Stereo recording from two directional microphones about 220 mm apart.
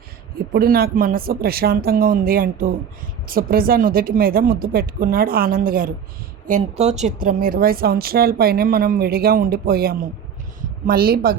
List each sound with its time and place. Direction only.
0.5 s speech: 45° right (ahead or behind)